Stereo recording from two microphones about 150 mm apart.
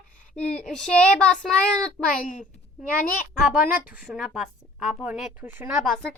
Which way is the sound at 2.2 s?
55° left (ahead or behind).